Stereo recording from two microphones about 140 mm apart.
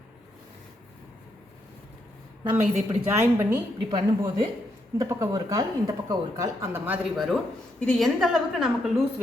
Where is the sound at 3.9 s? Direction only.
30° right (ahead or behind); by 7.0 s 15° right (ahead or behind).